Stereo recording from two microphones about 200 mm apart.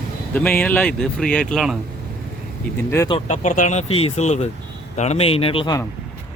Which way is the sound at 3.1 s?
35° left (ahead or behind).